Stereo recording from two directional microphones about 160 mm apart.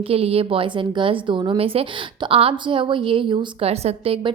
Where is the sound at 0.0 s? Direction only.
35° right (ahead or behind).